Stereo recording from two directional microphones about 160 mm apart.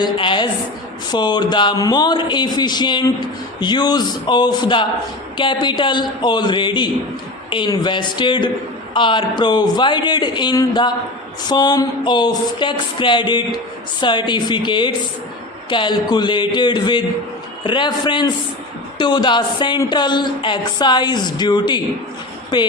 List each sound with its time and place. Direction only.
0.0 s a woman's voice: 30° left (ahead or behind)